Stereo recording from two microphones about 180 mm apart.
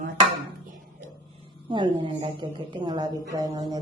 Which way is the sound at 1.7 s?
25° right (ahead or behind).